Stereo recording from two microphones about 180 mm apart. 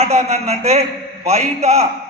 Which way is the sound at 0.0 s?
35° right (ahead or behind).